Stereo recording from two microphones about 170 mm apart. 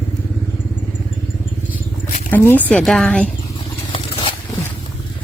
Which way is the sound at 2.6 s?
5° left (ahead or behind).